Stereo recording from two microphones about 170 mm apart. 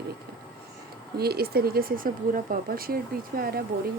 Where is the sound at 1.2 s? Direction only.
70° right (ahead or behind).